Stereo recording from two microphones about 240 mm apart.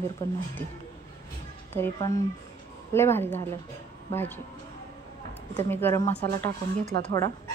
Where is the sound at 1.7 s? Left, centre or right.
Centre.